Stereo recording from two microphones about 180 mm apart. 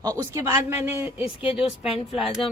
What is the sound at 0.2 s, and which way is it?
Speech, 15° right (ahead or behind).